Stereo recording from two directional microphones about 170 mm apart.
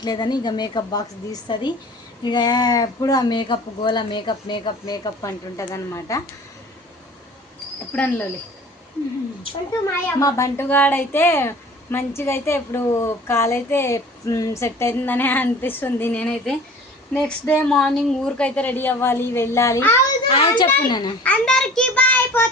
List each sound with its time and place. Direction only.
0.0 s speech: 25° left (ahead or behind)
7.9 s speech: 10° left (ahead or behind)
10.2 s speech: 20° left (ahead or behind)
20.2 s a child's voice: 30° left (ahead or behind)
21.2 s speech: 5° left (ahead or behind)